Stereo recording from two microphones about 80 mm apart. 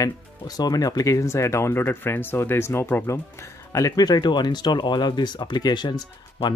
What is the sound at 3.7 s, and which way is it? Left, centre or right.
Speech, left.